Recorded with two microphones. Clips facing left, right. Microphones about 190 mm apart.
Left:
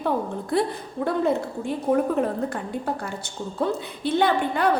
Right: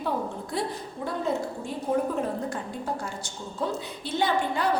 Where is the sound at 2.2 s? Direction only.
60° left (ahead or behind).